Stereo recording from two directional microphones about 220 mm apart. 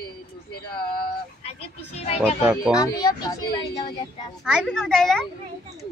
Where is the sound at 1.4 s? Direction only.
30° left (ahead or behind).